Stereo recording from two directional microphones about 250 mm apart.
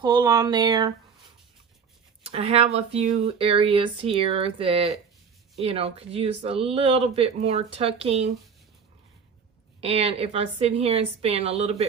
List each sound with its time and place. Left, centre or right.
0.0 s speech: centre
2.2 s speech: right
9.8 s speech: right